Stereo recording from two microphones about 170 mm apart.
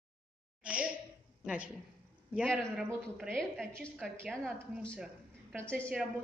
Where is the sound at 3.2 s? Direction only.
Centre (ahead or behind).